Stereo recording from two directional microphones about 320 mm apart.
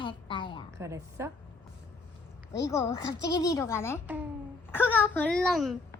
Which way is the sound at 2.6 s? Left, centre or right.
Centre.